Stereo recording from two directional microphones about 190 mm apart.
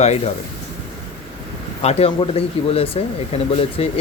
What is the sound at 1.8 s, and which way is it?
Speech, 30° left (ahead or behind).